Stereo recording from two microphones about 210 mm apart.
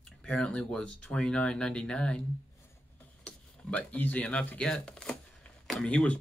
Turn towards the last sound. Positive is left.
turn(degrees=5)  # may be behind; listen again after turning